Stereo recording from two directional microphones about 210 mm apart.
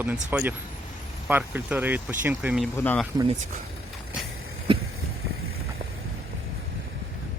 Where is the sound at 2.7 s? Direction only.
10° left (ahead or behind).